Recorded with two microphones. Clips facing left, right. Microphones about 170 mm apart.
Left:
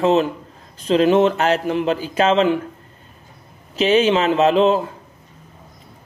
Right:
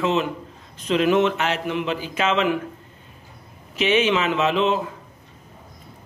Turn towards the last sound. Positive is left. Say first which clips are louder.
# left 6 dB
turn(degrees=35)  # may be behind; listen again after turning